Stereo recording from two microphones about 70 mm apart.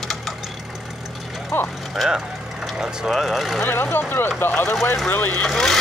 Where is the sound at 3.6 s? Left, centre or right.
Left.